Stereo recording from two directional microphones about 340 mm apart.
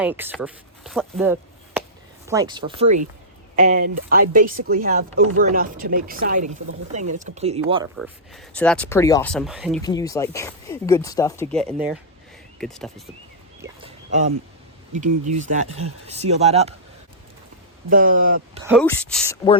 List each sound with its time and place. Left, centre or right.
0.0 s speech: centre
7.9 s speech: centre
9.8 s speech: centre
13.6 s a sound: centre
15.3 s speech: right
17.8 s speech: right
18.7 s speech: centre